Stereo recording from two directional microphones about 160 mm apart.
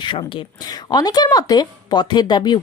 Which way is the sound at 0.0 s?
30° left (ahead or behind).